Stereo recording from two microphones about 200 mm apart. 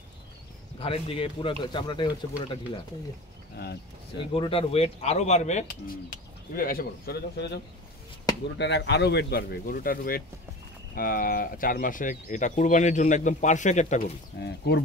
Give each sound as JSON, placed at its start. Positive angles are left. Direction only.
{"t": 0.7, "sound": "speech", "side_deg": 30}
{"t": 4.2, "sound": "speech", "side_deg": 25}
{"t": 6.5, "sound": "speech", "side_deg": 45}
{"t": 14.4, "sound": "speech", "side_deg": 55}